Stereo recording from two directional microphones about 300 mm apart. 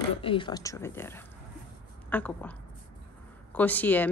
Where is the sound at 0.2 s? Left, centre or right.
Centre.